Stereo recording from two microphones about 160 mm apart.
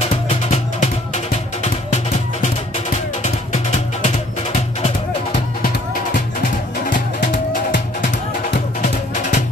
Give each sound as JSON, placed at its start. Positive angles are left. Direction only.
{"t": 0.1, "sound": "music", "side_deg": 45}
{"t": 3.2, "sound": "music", "side_deg": 45}
{"t": 8.8, "sound": "music", "side_deg": 50}